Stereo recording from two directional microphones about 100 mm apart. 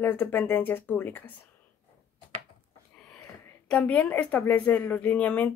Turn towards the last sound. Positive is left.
turn(degrees=15)  # may be behind; listen again after turning